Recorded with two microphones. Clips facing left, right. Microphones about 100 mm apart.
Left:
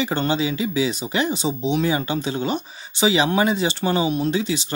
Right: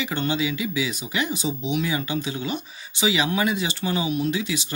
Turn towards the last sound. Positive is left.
turn(degrees=35)  # may be behind; listen again after turning